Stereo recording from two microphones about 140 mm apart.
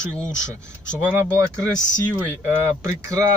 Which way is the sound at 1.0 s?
10° right (ahead or behind).